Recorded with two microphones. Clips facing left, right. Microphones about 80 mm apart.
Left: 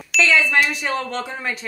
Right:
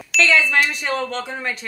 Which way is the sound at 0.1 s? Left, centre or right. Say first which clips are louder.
Even; centre.